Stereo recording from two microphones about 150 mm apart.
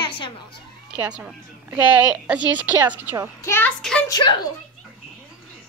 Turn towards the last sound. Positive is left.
turn(degrees=30)  # may be behind; listen again after turning